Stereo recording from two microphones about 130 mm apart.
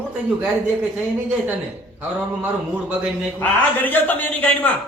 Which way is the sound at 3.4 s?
15° left (ahead or behind).